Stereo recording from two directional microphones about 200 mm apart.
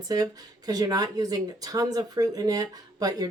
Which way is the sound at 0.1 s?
20° right (ahead or behind).